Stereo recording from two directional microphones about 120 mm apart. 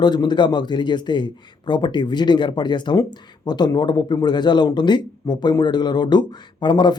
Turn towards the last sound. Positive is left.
turn(degrees=40)  # may be behind; listen again after turning